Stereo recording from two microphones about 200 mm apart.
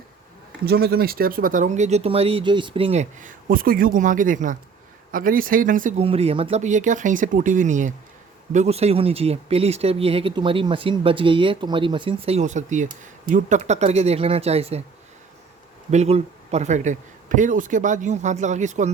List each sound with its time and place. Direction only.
0.6 s speech: 50° right (ahead or behind)
6.0 s speech: 30° right (ahead or behind)
15.9 s speech: 35° right (ahead or behind)